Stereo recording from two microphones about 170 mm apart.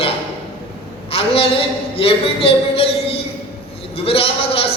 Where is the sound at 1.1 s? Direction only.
35° left (ahead or behind).